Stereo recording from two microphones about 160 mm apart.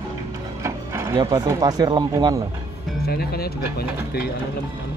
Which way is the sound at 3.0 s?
75° left (ahead or behind).